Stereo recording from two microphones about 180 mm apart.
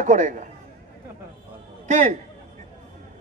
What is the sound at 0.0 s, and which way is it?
Speech, 45° right (ahead or behind).